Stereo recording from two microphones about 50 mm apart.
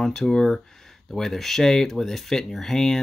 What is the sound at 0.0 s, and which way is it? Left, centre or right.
Speech, centre.